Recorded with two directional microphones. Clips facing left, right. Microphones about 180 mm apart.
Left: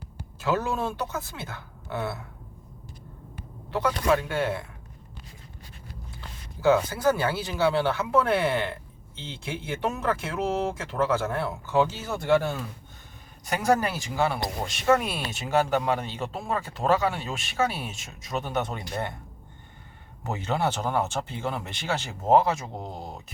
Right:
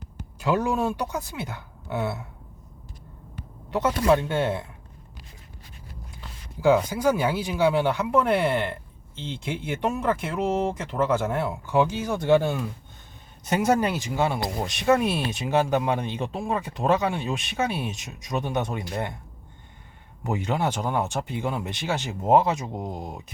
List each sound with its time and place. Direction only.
0.3 s speech: 15° right (ahead or behind)
3.7 s speech: 20° right (ahead or behind)
6.6 s speech: 15° right (ahead or behind)
20.2 s speech: 15° right (ahead or behind)